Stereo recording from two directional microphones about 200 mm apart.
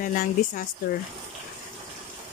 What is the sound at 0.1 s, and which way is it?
Speech, 40° left (ahead or behind).